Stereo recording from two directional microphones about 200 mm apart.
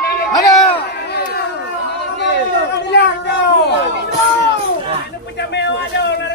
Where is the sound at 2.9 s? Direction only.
60° left (ahead or behind).